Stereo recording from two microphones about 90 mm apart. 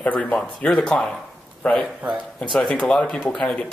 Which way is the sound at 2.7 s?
15° left (ahead or behind).